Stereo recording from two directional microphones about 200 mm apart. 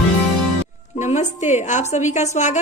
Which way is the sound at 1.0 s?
35° left (ahead or behind).